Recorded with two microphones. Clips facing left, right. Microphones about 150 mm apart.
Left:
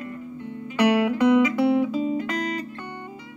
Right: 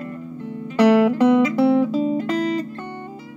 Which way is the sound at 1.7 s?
45° right (ahead or behind).